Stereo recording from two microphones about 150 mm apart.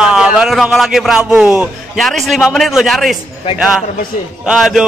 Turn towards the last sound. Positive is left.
turn(degrees=-5)  # may be behind; listen again after turning